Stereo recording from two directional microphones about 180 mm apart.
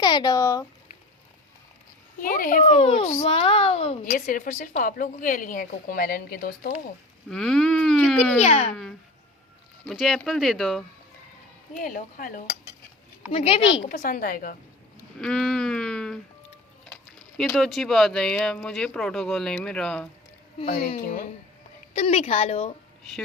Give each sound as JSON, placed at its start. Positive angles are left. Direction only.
{"t": 0.0, "sound": "speech", "side_deg": 25}
{"t": 2.1, "sound": "a woman's voice", "side_deg": 50}
{"t": 2.8, "sound": "a child's voice", "side_deg": 30}
{"t": 4.0, "sound": "a woman's voice", "side_deg": 50}
{"t": 7.3, "sound": "speech", "side_deg": 5}
{"t": 8.4, "sound": "a child's voice", "side_deg": 35}
{"t": 8.7, "sound": "speech", "side_deg": 0}
{"t": 11.8, "sound": "a woman's voice", "side_deg": 50}
{"t": 13.3, "sound": "a child's voice", "side_deg": 30}
{"t": 13.8, "sound": "a woman's voice", "side_deg": 45}
{"t": 15.2, "sound": "speech", "side_deg": 5}
{"t": 17.3, "sound": "speech", "side_deg": 5}
{"t": 20.9, "sound": "a woman's voice", "side_deg": 45}
{"t": 21.9, "sound": "a child's voice", "side_deg": 35}